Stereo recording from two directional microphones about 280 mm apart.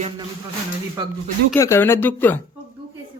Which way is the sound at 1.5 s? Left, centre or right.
Centre.